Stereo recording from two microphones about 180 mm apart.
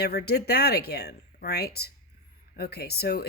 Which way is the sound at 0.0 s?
60° left (ahead or behind).